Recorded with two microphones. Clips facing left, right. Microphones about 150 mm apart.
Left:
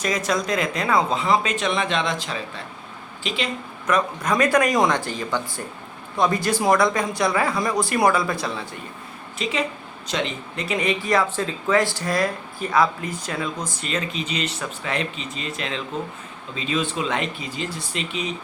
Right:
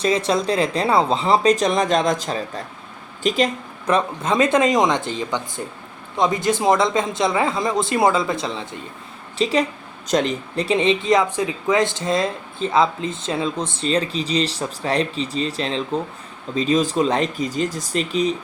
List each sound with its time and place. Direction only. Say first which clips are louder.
0.0 s speech: right 4 dB; 30° right (ahead or behind)
3.9 s speech: right 2 dB; 25° right (ahead or behind)
9.4 s speech: right 6 dB; 35° right (ahead or behind)